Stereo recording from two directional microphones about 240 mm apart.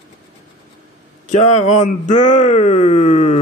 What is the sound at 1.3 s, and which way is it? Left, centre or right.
Speech, left.